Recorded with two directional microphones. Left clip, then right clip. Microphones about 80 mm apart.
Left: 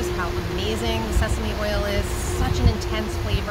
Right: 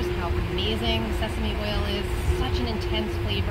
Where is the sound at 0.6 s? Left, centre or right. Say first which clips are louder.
Even; left.